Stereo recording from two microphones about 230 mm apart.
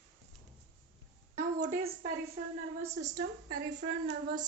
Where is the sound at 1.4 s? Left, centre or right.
Right.